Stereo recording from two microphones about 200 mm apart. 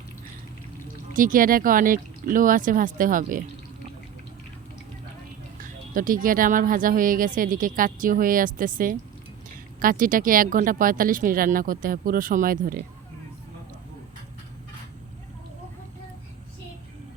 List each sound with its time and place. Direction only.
1.1 s speech: 45° right (ahead or behind)
5.9 s speech: 45° right (ahead or behind)
9.8 s speech: 45° right (ahead or behind)